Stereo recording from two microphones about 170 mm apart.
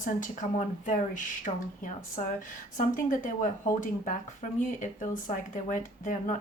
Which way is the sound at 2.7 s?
50° left (ahead or behind).